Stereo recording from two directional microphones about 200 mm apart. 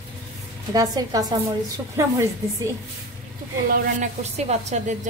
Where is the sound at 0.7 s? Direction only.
20° right (ahead or behind).